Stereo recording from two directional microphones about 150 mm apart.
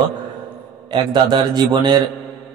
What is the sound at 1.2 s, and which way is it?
Speech, 30° right (ahead or behind).